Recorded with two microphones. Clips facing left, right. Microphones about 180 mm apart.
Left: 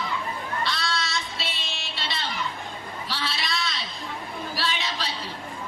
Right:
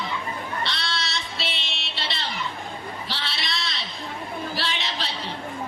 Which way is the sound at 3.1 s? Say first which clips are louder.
Left 5 dB; 25° right (ahead or behind).